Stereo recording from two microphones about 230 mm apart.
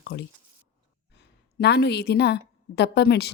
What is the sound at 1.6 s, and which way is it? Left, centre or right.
A woman's voice, left.